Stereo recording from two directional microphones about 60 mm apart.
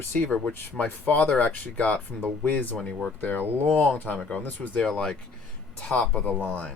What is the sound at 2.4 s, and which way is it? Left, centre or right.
Speech, left.